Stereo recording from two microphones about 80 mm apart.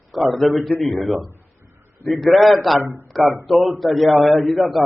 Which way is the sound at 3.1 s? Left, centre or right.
Centre.